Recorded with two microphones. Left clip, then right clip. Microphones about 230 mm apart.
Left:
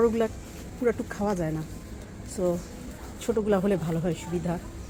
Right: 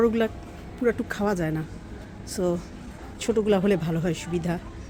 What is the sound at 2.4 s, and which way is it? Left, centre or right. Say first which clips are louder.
Speech: right 1 dB; right.